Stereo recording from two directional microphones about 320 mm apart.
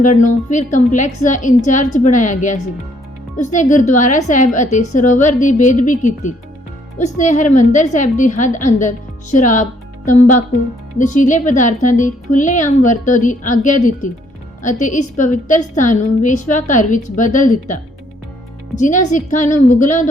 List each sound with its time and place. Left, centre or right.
0.0 s a woman's voice: left
10.9 s a woman's voice: left
18.8 s a woman's voice: left